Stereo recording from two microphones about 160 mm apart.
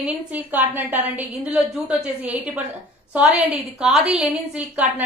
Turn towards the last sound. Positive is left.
turn(degrees=-5)  # may be behind; listen again after turning